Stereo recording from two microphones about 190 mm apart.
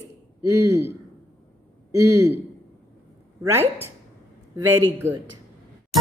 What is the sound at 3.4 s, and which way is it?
Speech, 10° right (ahead or behind).